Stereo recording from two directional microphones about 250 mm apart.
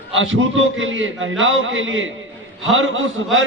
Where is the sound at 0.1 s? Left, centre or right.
Right.